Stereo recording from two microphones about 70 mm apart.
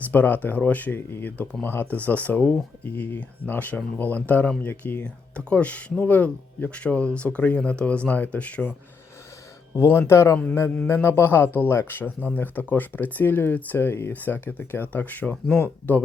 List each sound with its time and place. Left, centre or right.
0.1 s speech: left
9.7 s a man's voice: left